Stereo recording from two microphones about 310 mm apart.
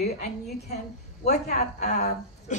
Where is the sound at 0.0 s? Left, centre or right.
Left.